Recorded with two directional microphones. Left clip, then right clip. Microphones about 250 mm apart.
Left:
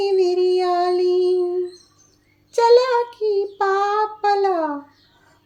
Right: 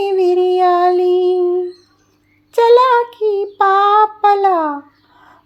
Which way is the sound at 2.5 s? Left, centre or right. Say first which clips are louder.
Right 5 dB; centre.